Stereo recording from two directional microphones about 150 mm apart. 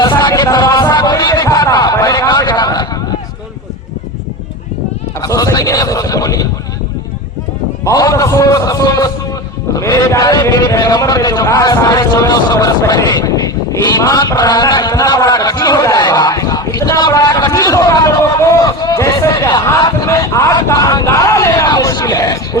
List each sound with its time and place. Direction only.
0.0 s music: 30° left (ahead or behind)
5.2 s speech: 20° left (ahead or behind)
7.9 s a man's voice: 20° left (ahead or behind)